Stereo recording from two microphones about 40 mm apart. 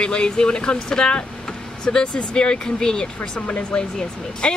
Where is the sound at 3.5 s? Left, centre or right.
Left.